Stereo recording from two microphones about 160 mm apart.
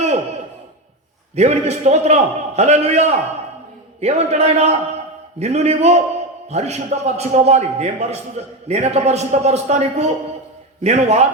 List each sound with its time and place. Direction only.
1.4 s a man's voice: 45° right (ahead or behind)